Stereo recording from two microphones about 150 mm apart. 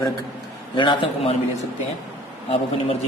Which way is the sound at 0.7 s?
35° left (ahead or behind).